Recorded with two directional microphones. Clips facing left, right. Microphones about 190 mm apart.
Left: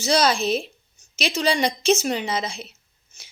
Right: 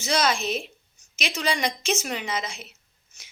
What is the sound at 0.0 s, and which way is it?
A woman's voice, 35° left (ahead or behind).